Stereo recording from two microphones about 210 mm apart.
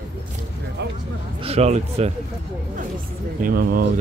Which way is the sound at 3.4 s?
45° right (ahead or behind).